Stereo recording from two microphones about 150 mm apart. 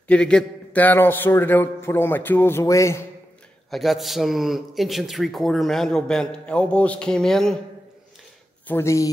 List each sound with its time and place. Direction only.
0.1 s a man's voice: 5° left (ahead or behind)
3.7 s a man's voice: centre (ahead or behind)
8.6 s speech: 15° left (ahead or behind)